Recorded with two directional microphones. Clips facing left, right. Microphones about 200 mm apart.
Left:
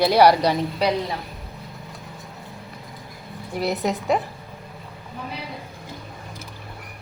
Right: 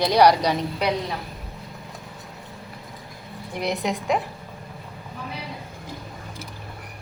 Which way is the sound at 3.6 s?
5° left (ahead or behind).